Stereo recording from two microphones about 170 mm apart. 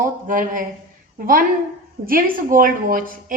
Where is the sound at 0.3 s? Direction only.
50° right (ahead or behind).